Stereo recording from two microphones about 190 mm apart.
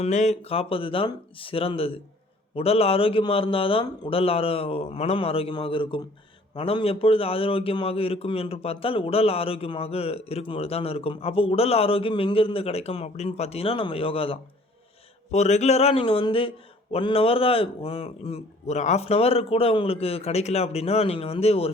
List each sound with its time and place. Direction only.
0.0 s a man's voice: 40° left (ahead or behind)